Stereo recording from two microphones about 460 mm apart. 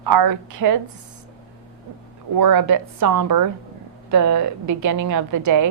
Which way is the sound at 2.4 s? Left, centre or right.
Right.